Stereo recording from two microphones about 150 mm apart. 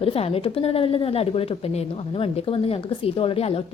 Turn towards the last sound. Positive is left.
turn(degrees=40)  # may be behind; listen again after turning